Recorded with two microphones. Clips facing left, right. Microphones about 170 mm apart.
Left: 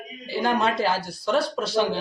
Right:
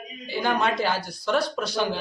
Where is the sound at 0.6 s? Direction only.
30° left (ahead or behind).